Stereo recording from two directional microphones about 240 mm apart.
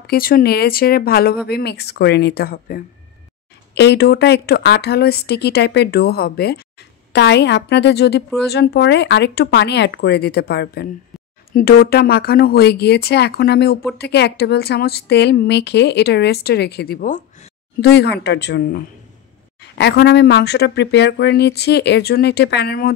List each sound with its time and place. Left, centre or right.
0.0 s speech: left